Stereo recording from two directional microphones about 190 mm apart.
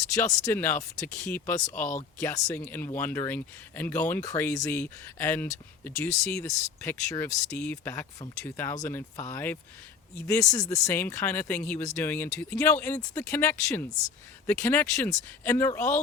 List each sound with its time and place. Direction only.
0.1 s speech: 15° left (ahead or behind)
1.6 s speech: 40° left (ahead or behind)
2.2 s speech: 15° left (ahead or behind)